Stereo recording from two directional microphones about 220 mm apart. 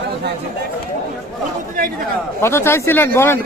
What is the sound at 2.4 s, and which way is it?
Speech, 10° left (ahead or behind).